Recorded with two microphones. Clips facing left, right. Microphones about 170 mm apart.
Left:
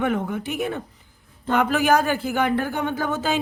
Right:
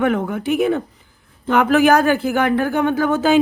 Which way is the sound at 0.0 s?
75° right (ahead or behind).